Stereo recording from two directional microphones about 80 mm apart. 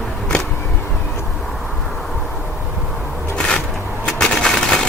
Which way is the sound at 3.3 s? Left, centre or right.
Centre.